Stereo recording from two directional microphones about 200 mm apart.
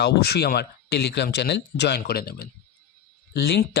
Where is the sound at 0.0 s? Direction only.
55° left (ahead or behind).